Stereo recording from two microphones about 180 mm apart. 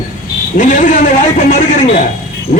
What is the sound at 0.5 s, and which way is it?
Speech, 45° left (ahead or behind).